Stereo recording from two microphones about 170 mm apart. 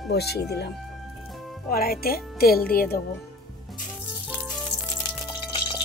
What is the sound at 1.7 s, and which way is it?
Speech, 60° left (ahead or behind).